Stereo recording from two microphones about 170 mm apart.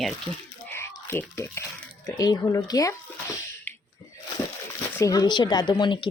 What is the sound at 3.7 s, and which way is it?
Sneeze, 10° left (ahead or behind).